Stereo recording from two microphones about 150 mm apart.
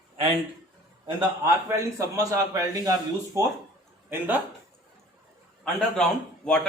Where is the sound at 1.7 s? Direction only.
20° right (ahead or behind).